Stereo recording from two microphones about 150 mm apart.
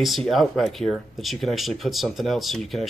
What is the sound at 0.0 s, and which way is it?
Speech, centre (ahead or behind).